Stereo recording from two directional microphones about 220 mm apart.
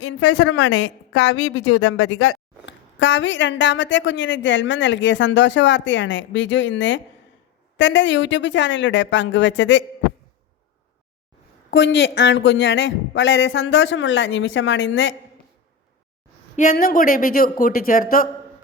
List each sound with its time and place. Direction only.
0.0 s a woman's voice: 90° left
1.2 s a woman's voice: 55° left (ahead or behind)
2.0 s speech: 85° left
2.6 s a woman's voice: 55° left (ahead or behind)
11.7 s a woman's voice: 55° left (ahead or behind)
16.6 s speech: 40° left (ahead or behind)